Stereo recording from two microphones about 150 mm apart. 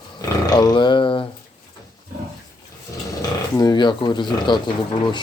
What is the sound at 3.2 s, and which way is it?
Speech, 25° left (ahead or behind).